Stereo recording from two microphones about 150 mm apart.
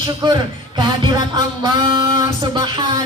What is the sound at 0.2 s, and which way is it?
Music, 30° right (ahead or behind).